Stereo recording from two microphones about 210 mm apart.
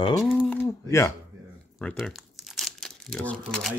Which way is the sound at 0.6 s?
15° left (ahead or behind).